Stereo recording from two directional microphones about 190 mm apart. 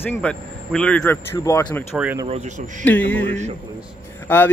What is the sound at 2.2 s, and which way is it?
Speech, 35° right (ahead or behind).